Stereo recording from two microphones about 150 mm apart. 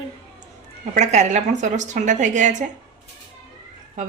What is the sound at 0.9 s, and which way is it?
A woman's voice, 50° right (ahead or behind).